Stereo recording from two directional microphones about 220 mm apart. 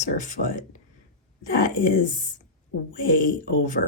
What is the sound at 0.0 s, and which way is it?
Speech, 35° left (ahead or behind).